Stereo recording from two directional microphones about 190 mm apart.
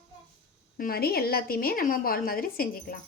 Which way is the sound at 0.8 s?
50° left (ahead or behind).